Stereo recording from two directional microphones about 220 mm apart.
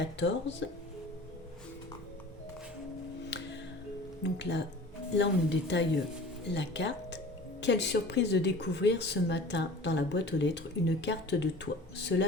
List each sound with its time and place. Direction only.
0.0 s speech: 55° left (ahead or behind)
3.2 s music: 50° left (ahead or behind)
4.2 s speech: 55° left (ahead or behind)